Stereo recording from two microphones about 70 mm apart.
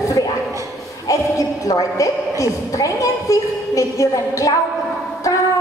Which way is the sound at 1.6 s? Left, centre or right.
Left.